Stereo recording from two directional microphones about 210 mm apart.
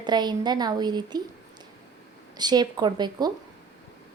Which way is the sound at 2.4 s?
20° right (ahead or behind).